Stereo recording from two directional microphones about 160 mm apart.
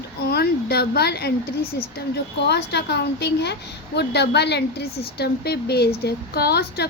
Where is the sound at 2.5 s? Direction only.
90° left.